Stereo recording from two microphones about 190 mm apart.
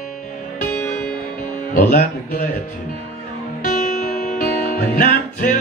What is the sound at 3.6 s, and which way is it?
Music, 40° left (ahead or behind).